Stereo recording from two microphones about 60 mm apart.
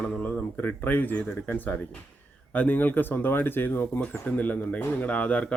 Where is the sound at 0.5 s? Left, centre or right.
Left.